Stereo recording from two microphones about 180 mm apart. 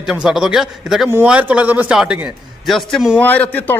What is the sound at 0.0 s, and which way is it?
A man's voice, 5° right (ahead or behind).